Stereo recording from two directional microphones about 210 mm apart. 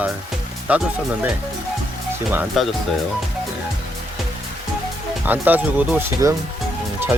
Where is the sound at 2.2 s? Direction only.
5° right (ahead or behind).